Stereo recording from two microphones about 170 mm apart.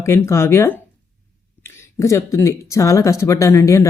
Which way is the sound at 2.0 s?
20° left (ahead or behind).